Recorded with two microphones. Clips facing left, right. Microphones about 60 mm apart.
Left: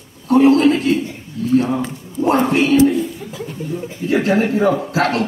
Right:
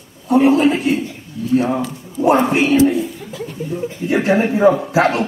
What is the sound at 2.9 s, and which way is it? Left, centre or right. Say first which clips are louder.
Speech: even; centre.